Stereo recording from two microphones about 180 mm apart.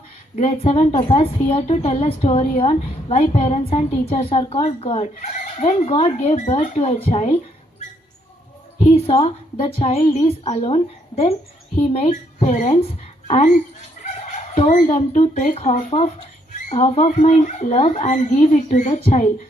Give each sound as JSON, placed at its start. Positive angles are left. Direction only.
{"t": 0.3, "sound": "speech", "side_deg": 35}
{"t": 8.8, "sound": "speech", "side_deg": 30}